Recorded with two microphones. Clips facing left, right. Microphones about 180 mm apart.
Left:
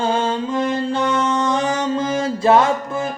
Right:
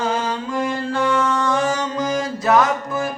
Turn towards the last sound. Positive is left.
turn(degrees=25)  # may be behind; listen again after turning